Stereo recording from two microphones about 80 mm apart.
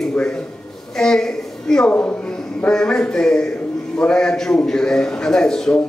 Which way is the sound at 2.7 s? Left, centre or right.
Centre.